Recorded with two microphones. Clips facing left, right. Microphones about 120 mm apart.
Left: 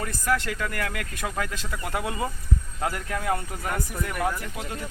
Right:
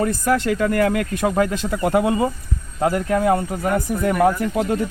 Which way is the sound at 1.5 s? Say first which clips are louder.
Right 12 dB; 50° right (ahead or behind).